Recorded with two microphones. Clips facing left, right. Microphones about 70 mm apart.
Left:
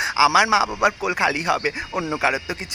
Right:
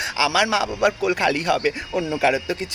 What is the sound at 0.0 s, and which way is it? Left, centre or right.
Speech, centre.